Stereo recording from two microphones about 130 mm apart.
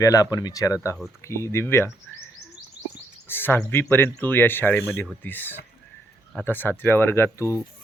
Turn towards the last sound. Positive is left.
turn(degrees=20)  # may be behind; listen again after turning